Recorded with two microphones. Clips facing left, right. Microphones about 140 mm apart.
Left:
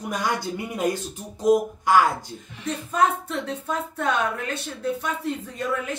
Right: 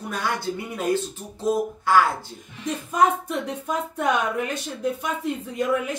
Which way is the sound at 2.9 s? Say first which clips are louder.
Right 2 dB; 15° right (ahead or behind).